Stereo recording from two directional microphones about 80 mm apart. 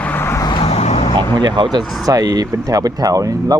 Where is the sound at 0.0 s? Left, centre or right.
Left.